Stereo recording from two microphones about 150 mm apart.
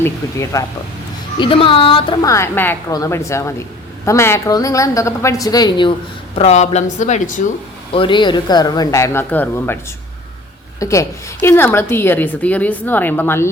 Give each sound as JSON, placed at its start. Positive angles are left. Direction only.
{"t": 0.0, "sound": "a woman's voice", "side_deg": 20}
{"t": 1.4, "sound": "speech", "side_deg": 35}
{"t": 2.2, "sound": "a woman's voice", "side_deg": 20}
{"t": 6.3, "sound": "speech", "side_deg": 45}
{"t": 7.9, "sound": "a woman's voice", "side_deg": 35}
{"t": 10.8, "sound": "a woman's voice", "side_deg": 20}